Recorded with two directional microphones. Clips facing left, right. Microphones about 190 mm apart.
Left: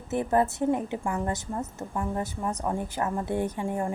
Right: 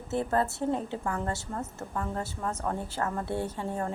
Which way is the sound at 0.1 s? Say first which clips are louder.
Left 3 dB; 15° left (ahead or behind).